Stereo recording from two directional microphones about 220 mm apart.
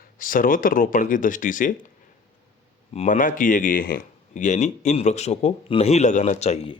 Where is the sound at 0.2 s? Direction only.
40° left (ahead or behind).